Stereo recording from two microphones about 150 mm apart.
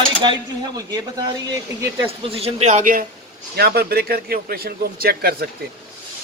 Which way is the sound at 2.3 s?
45° right (ahead or behind).